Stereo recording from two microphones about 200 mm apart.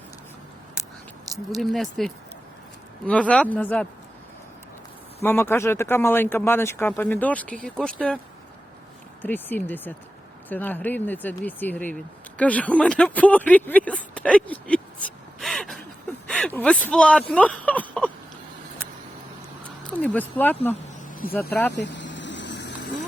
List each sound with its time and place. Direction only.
1.5 s speech: centre (ahead or behind)
5.2 s speech: 10° left (ahead or behind)
9.2 s speech: 10° left (ahead or behind)
15.0 s gasp: centre (ahead or behind)
16.2 s speech: 5° left (ahead or behind)
19.9 s speech: 10° left (ahead or behind)
21.1 s vehicle: 45° left (ahead or behind)
21.8 s a sound: 65° left (ahead or behind)